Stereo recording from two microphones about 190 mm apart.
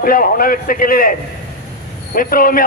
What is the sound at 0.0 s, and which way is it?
A man's voice, 50° left (ahead or behind).